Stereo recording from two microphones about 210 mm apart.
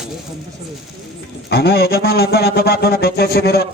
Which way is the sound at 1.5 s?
50° left (ahead or behind).